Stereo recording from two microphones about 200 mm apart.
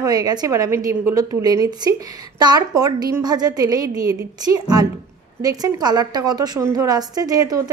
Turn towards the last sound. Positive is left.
turn(degrees=-20)  # may be behind; listen again after turning